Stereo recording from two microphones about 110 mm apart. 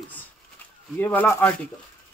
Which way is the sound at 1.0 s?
15° left (ahead or behind).